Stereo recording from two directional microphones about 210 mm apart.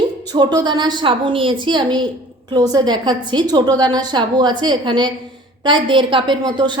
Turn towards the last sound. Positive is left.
turn(degrees=-20)  # may be behind; listen again after turning